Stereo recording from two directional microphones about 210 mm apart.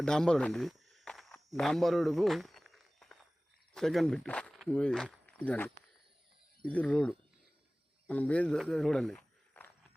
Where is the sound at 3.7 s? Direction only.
Centre (ahead or behind).